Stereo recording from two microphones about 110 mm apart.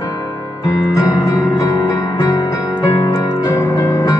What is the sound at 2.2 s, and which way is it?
Music, 40° left (ahead or behind).